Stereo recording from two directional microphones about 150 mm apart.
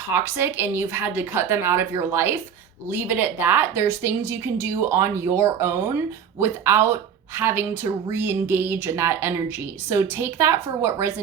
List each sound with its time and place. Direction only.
0.1 s speech: 15° right (ahead or behind)